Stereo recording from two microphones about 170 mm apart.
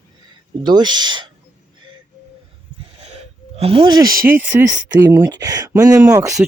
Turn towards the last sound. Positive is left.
turn(degrees=-20)  # may be behind; listen again after turning